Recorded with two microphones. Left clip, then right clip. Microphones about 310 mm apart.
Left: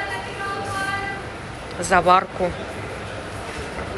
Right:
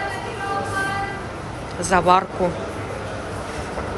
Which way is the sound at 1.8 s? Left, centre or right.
Centre.